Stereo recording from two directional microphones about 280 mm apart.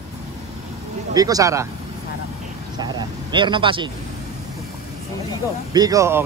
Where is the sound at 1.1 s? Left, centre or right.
Centre.